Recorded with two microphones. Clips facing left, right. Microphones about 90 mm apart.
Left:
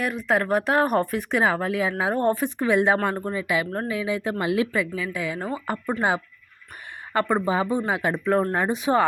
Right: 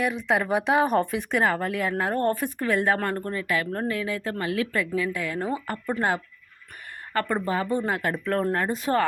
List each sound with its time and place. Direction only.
0.3 s speech: centre (ahead or behind); by 4.7 s 20° left (ahead or behind)
4.7 s a woman's voice: centre (ahead or behind)